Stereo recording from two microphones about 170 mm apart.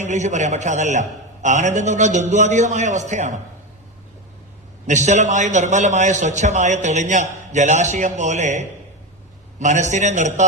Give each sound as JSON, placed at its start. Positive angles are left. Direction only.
{"t": 0.0, "sound": "a man's voice", "side_deg": -45}
{"t": 4.9, "sound": "a man's voice", "side_deg": -45}